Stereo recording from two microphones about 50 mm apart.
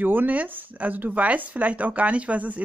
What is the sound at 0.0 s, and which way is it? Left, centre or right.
A man's voice, right.